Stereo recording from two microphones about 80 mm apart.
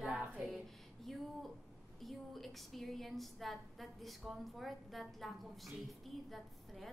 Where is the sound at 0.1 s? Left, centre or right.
Centre.